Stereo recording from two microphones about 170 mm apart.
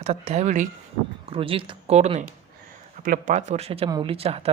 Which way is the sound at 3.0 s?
55° right (ahead or behind).